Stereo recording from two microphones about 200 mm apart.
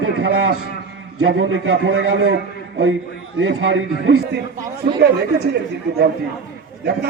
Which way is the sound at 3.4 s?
75° right (ahead or behind).